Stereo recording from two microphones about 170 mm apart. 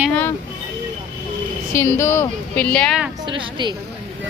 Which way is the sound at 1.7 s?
15° left (ahead or behind).